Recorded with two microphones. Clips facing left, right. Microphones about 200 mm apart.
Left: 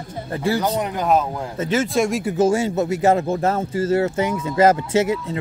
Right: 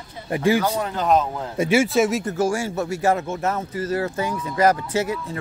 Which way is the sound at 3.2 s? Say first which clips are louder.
Left 4 dB; 30° left (ahead or behind).